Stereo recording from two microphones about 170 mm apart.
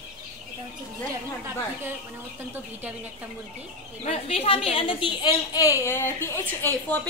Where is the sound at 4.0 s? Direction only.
35° left (ahead or behind); by 7.0 s 10° left (ahead or behind).